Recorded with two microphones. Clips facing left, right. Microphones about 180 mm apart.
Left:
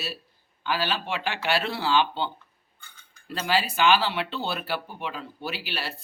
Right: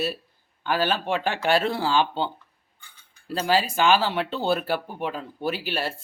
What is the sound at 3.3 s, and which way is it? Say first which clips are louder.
Speech: right 3 dB; 35° right (ahead or behind).